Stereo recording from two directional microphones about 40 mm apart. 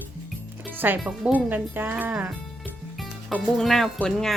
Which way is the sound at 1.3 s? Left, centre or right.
Right.